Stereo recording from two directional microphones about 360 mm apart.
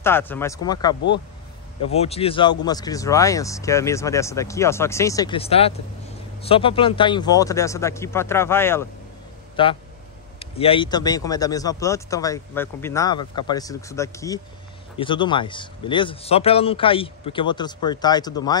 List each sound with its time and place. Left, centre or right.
0.0 s speech: centre